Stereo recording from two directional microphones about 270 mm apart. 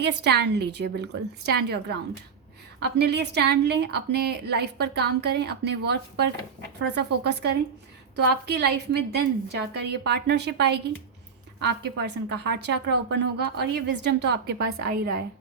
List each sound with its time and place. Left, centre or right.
0.0 s a woman's voice: right
3.0 s a woman's voice: right
11.8 s a woman's voice: right